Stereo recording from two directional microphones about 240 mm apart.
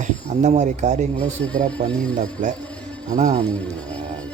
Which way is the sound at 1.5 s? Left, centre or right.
Centre.